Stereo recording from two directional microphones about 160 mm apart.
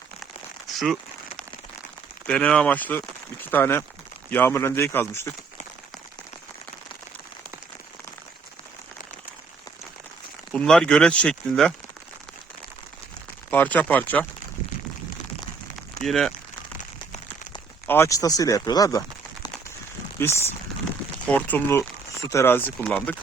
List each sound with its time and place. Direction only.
2.2 s speech: 5° left (ahead or behind)
10.5 s speech: 5° left (ahead or behind)
13.5 s speech: 10° left (ahead or behind)
16.0 s speech: 5° left (ahead or behind)
17.8 s speech: 15° left (ahead or behind)